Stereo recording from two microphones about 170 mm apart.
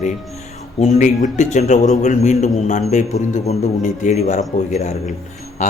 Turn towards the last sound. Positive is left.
turn(degrees=45)  # may be behind; listen again after turning